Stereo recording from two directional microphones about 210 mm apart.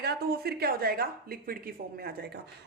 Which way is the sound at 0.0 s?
50° right (ahead or behind).